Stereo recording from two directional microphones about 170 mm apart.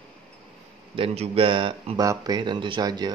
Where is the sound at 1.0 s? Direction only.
30° right (ahead or behind).